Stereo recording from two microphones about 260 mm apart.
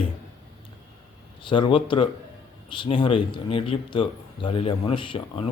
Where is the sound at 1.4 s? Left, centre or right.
Centre.